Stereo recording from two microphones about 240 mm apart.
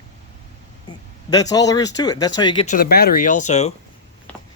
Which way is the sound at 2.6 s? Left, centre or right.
Left.